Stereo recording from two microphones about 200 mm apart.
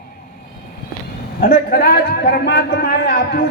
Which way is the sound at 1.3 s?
50° left (ahead or behind).